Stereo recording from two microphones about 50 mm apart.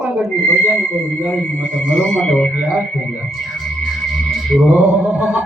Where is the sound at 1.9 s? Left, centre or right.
Centre.